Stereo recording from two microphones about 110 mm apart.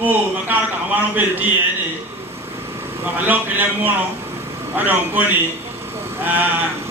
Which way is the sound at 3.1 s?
15° right (ahead or behind).